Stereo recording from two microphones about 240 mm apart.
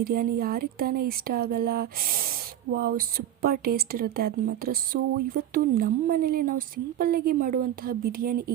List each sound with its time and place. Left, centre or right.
0.0 s speech: right